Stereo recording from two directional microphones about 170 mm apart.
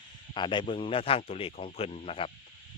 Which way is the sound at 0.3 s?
30° left (ahead or behind).